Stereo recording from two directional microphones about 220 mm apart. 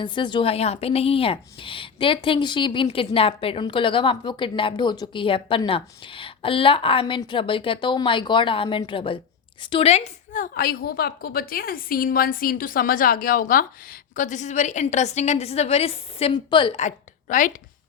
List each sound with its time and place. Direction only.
0.0 s a woman's voice: 20° left (ahead or behind); by 17.5 s 35° left (ahead or behind)